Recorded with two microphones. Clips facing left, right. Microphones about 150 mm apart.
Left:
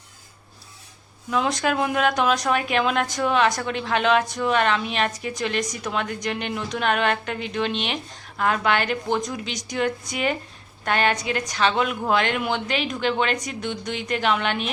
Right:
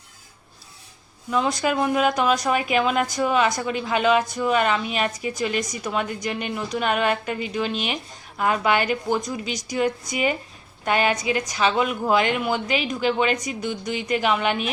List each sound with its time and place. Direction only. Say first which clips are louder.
1.3 s speech: right 1 dB; centre (ahead or behind)